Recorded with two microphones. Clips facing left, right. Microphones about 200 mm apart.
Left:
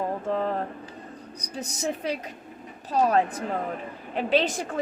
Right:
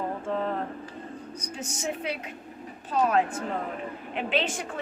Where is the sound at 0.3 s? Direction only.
40° left (ahead or behind).